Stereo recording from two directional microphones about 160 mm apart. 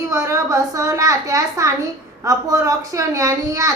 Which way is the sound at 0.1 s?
20° right (ahead or behind).